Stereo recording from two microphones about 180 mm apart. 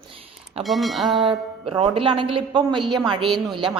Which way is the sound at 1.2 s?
30° right (ahead or behind).